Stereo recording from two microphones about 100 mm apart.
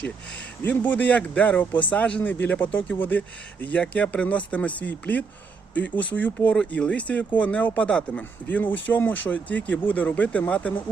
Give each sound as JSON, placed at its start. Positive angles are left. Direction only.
{"t": 0.6, "sound": "speech", "side_deg": 15}